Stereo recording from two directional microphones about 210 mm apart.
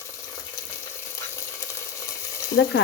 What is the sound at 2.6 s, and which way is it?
Speech, 65° left (ahead or behind).